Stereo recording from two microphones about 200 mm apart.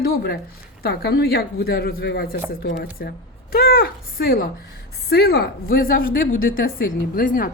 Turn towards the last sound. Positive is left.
turn(degrees=45)  # may be behind; listen again after turning